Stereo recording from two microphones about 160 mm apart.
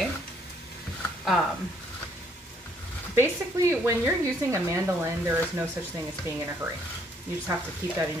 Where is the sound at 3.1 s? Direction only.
15° right (ahead or behind).